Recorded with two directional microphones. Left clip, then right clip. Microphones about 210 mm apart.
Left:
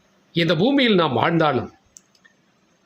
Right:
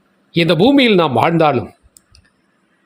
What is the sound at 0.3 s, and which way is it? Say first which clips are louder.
Speech: right 7 dB; 30° right (ahead or behind).